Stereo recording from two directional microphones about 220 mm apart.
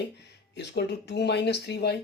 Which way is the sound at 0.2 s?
50° left (ahead or behind).